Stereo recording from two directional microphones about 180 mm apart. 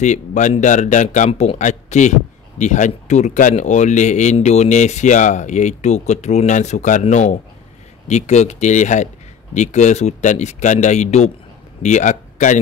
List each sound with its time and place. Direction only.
0.0 s a man's voice: 40° left (ahead or behind)